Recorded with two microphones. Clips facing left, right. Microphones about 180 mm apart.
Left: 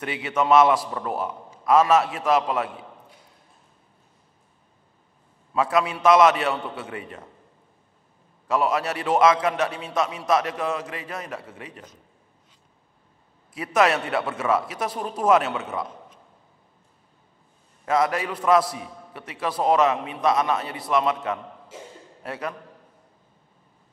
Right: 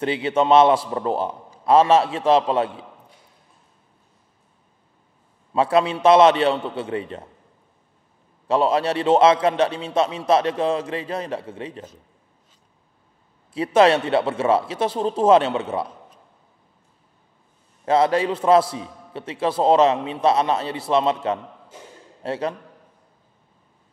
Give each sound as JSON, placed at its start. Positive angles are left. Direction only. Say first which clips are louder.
{"t": 0.0, "sound": "a man's voice", "louder": "right 5 dB", "side_deg": -30}
{"t": 5.5, "sound": "a man's voice", "louder": "right 4 dB", "side_deg": -30}
{"t": 8.5, "sound": "a man's voice", "louder": "right 4 dB", "side_deg": -30}
{"t": 13.5, "sound": "a man's voice", "louder": "right 5 dB", "side_deg": -30}
{"t": 17.8, "sound": "a man's voice", "louder": "right 5 dB", "side_deg": -30}